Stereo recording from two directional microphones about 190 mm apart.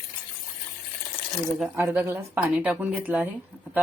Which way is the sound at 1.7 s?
10° right (ahead or behind).